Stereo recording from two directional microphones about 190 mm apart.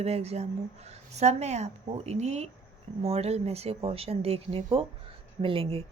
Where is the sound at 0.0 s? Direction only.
35° right (ahead or behind).